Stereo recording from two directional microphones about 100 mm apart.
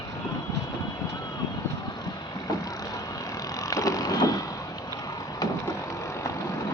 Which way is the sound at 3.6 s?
35° left (ahead or behind).